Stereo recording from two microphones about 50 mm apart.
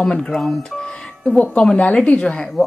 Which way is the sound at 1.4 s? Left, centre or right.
Left.